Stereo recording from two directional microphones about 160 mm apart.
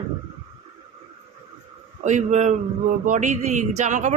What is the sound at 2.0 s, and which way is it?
Speech, 45° right (ahead or behind).